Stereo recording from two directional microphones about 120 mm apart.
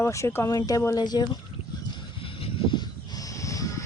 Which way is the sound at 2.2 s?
45° left (ahead or behind).